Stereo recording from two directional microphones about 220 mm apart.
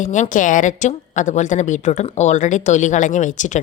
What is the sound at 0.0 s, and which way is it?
A woman's voice, 35° left (ahead or behind).